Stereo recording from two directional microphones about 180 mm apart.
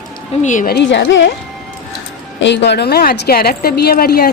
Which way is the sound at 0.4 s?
45° left (ahead or behind).